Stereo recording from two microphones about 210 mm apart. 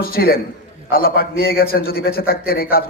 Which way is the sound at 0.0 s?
45° left (ahead or behind).